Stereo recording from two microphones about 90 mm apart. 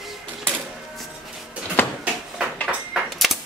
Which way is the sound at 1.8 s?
20° left (ahead or behind).